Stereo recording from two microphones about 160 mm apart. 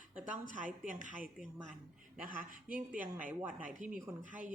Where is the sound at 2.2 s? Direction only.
60° right (ahead or behind).